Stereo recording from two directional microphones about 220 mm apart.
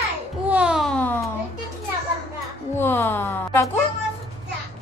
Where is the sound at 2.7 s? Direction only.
10° left (ahead or behind).